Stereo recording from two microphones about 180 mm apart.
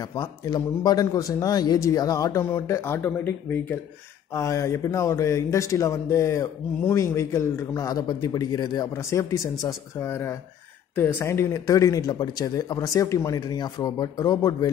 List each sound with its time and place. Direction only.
0.1 s speech: 20° left (ahead or behind)